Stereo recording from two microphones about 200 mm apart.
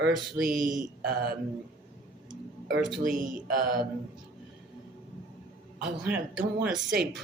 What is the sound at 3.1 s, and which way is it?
Mantra, 40° right (ahead or behind).